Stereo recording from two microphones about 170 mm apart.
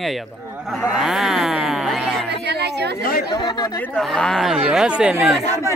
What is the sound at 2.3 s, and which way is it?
Speech, 75° right (ahead or behind).